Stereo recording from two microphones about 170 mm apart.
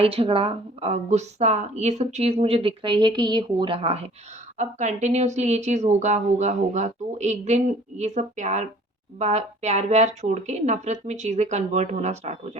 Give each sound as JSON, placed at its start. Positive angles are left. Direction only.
{"t": 0.0, "sound": "a woman's voice", "side_deg": -35}